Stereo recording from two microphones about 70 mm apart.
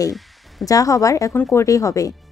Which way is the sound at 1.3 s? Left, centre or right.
Left.